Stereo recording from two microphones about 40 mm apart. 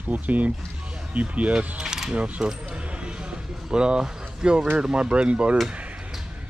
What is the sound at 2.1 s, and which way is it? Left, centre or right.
Coin, right.